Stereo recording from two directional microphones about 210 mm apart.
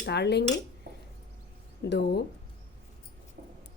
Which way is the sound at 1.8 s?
50° left (ahead or behind).